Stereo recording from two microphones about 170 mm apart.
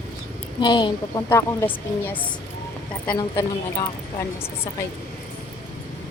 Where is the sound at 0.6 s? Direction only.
25° left (ahead or behind).